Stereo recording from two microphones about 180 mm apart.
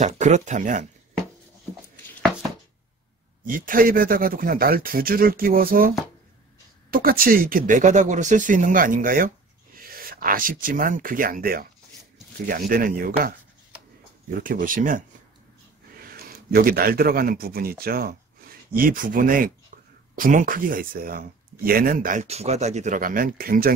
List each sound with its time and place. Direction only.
0.0 s speech: 40° right (ahead or behind)
3.4 s speech: 50° right (ahead or behind)
14.4 s speech: 50° right (ahead or behind)
16.5 s speech: 55° right (ahead or behind)